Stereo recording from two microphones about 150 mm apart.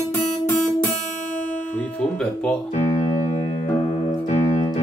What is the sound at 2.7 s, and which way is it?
Music, 45° left (ahead or behind).